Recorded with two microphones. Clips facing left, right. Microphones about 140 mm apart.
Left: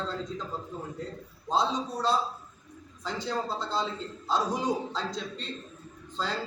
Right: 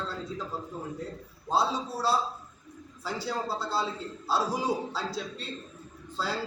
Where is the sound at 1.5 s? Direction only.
5° right (ahead or behind).